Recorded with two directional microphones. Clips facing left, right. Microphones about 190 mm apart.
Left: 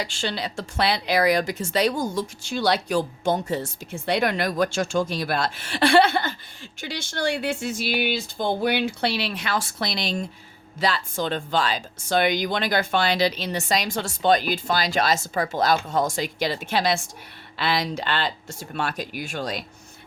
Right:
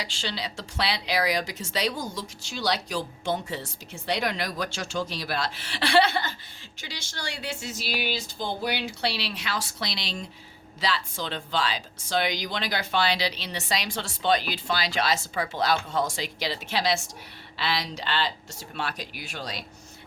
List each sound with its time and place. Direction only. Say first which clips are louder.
0.0 s speech: left 5 dB; 50° left (ahead or behind)